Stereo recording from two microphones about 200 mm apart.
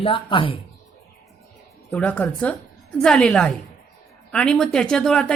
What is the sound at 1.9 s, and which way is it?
Speech, 10° left (ahead or behind).